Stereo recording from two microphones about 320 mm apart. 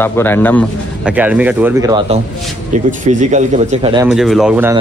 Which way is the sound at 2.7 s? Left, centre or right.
Right.